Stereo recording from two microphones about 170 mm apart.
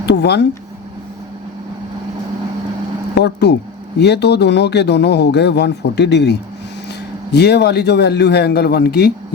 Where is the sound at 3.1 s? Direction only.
80° left.